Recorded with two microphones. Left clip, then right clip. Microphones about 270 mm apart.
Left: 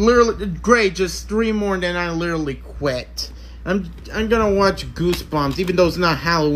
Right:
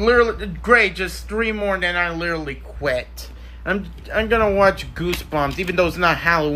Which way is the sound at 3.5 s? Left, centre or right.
Centre.